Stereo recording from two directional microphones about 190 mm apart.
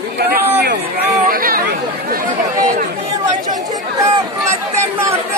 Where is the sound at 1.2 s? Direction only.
50° right (ahead or behind).